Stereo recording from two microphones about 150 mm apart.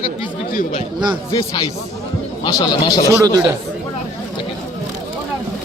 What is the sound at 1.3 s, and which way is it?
Speech, 25° left (ahead or behind).